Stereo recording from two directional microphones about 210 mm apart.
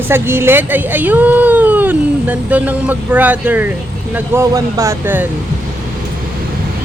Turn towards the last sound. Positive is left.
turn(degrees=-10)  # may be behind; listen again after turning